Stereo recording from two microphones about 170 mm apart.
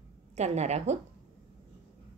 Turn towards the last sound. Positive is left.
turn(degrees=-40)  # may be behind; listen again after turning